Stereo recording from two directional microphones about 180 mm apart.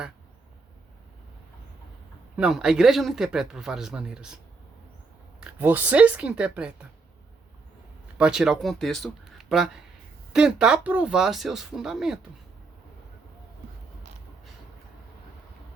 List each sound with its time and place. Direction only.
2.3 s speech: 5° right (ahead or behind)
5.4 s speech: 10° right (ahead or behind)
8.0 s speech: 5° right (ahead or behind)